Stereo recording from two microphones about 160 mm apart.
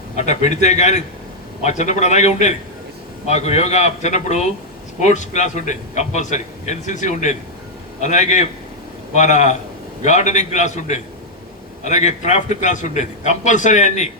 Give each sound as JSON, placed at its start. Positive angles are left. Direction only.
{"t": 0.2, "sound": "a man's voice", "side_deg": 45}